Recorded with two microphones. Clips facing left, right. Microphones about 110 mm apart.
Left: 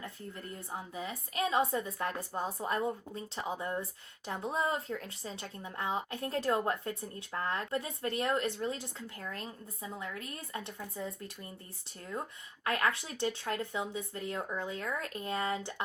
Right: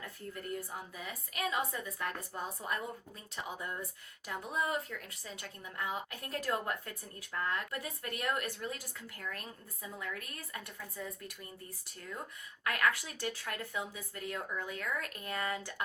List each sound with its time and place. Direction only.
0.7 s a woman's voice: 25° left (ahead or behind)
12.6 s a woman's voice: 30° left (ahead or behind)